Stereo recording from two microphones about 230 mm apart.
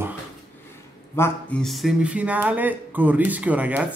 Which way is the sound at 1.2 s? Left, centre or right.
Centre.